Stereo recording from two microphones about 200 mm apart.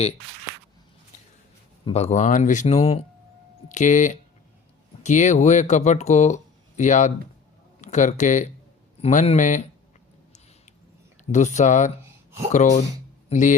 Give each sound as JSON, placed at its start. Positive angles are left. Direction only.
{"t": 1.8, "sound": "speech", "side_deg": 30}
{"t": 11.3, "sound": "speech", "side_deg": 35}